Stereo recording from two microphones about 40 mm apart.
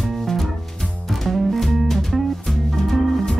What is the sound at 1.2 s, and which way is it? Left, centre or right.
Music, centre.